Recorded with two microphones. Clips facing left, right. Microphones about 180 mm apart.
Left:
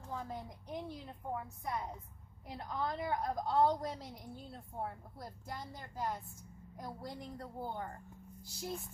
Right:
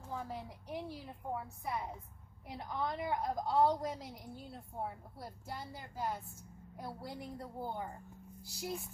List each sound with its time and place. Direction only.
0.2 s a woman's voice: 10° right (ahead or behind)